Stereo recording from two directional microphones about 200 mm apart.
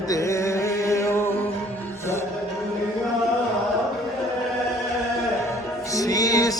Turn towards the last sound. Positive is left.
turn(degrees=15)  # may be behind; listen again after turning